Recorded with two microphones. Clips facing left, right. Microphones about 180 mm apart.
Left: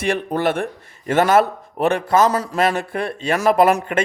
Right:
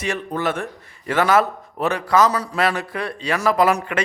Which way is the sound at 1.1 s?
50° left (ahead or behind).